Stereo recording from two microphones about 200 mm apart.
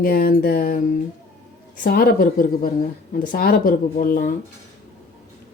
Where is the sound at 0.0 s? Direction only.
45° left (ahead or behind).